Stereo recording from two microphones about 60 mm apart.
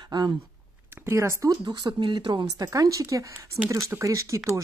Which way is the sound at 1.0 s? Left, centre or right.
Right.